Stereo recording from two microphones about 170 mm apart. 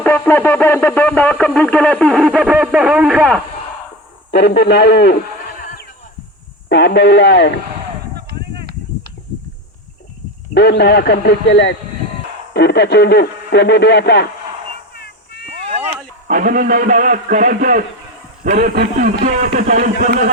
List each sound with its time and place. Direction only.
0.0 s speech: 10° left (ahead or behind)
2.6 s a sound: 5° right (ahead or behind)
3.2 s speech: 5° left (ahead or behind)
4.3 s speech: 85° left
6.7 s speech: 90° left
8.1 s a sound: 70° right (ahead or behind)
10.5 s speech: 80° left
12.5 s speech: 80° left
14.9 s a sound: 70° left (ahead or behind)
16.2 s a man's voice: 50° right (ahead or behind)
18.7 s a man's voice: 60° right (ahead or behind)